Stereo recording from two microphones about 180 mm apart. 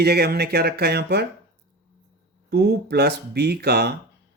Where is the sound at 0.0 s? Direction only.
60° right (ahead or behind).